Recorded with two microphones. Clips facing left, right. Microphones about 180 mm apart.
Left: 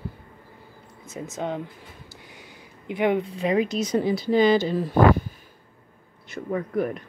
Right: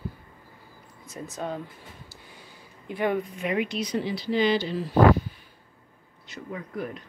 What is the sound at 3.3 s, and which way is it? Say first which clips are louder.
Speech: left 5 dB; 35° left (ahead or behind).